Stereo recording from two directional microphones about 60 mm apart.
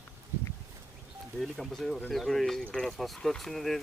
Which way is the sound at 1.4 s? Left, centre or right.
Centre.